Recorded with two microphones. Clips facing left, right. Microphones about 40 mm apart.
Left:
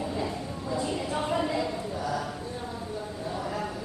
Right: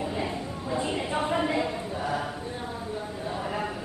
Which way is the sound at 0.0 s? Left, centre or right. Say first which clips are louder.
Right 1 dB; right.